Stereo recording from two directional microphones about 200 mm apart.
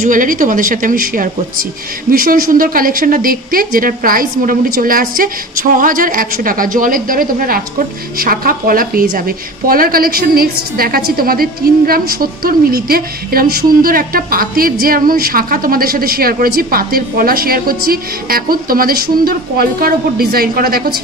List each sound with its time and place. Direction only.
0.0 s a woman's voice: 40° right (ahead or behind)